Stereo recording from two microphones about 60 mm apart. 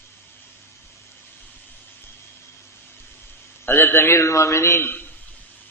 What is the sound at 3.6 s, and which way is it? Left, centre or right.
A man's voice, left.